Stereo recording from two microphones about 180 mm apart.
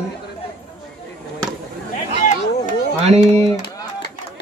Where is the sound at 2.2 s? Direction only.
40° left (ahead or behind).